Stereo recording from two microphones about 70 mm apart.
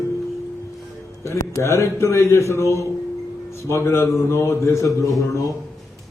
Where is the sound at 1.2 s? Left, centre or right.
Left.